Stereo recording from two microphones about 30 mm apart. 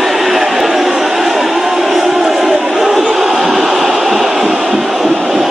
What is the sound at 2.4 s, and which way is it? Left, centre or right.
Crowd, right.